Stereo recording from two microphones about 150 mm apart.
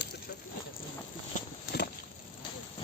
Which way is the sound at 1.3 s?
55° left (ahead or behind).